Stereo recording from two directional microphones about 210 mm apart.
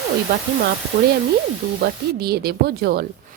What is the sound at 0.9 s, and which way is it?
Sizzle, 55° right (ahead or behind).